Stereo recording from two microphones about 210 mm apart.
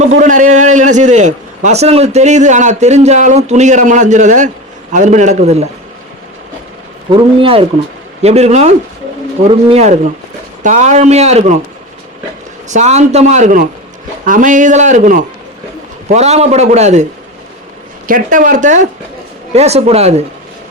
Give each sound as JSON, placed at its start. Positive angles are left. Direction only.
{"t": 0.2, "sound": "a man's voice", "side_deg": -40}
{"t": 7.1, "sound": "a man's voice", "side_deg": -25}
{"t": 12.6, "sound": "a man's voice", "side_deg": -35}
{"t": 18.1, "sound": "a man's voice", "side_deg": -40}